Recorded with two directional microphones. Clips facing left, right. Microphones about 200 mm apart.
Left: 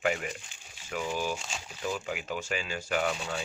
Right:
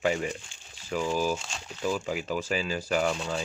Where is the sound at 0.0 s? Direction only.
30° right (ahead or behind).